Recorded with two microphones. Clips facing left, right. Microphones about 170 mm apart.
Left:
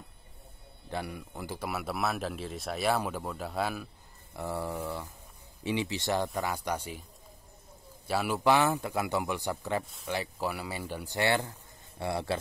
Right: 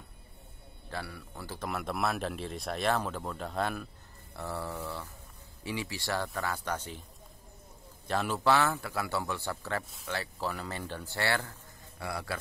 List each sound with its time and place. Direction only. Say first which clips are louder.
0.8 s speech: left 4 dB; 20° left (ahead or behind)
4.4 s speech: left 3 dB; 15° left (ahead or behind)
8.1 s speech: left 2 dB; 10° left (ahead or behind); by 12.4 s 25° left (ahead or behind)